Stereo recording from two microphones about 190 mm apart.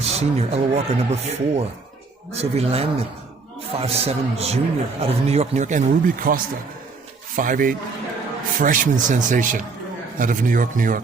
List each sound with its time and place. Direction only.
0.1 s a man's voice: 35° right (ahead or behind)